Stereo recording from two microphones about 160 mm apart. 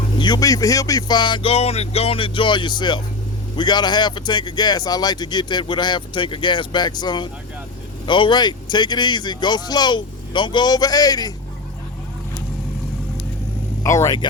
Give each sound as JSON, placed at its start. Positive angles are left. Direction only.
{"t": 0.2, "sound": "speech", "side_deg": 25}
{"t": 13.8, "sound": "speech", "side_deg": 20}